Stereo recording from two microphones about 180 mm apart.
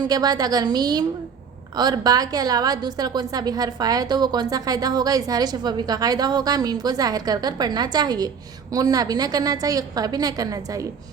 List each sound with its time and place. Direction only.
0.0 s a woman's voice: 20° right (ahead or behind)